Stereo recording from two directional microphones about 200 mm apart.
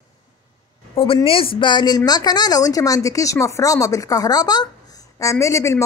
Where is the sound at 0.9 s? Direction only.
25° left (ahead or behind).